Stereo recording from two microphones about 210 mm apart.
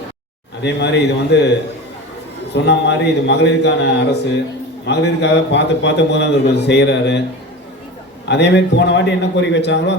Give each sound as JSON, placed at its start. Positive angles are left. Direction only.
{"t": 0.6, "sound": "a man's voice", "side_deg": 55}
{"t": 2.6, "sound": "a man's voice", "side_deg": 55}
{"t": 8.3, "sound": "a man's voice", "side_deg": 55}